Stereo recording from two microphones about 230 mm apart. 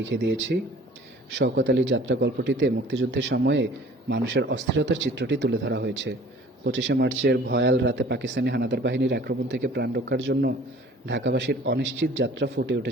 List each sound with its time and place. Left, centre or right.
0.0 s a man's voice: right